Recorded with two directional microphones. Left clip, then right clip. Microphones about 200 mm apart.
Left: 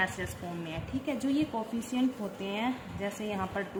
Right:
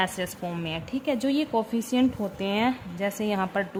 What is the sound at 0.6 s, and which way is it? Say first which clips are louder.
Speech: right 7 dB; 50° right (ahead or behind).